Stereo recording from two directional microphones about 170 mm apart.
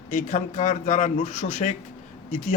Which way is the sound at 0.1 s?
50° left (ahead or behind).